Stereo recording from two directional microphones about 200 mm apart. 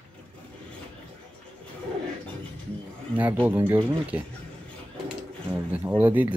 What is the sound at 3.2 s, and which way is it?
Speech, 10° right (ahead or behind).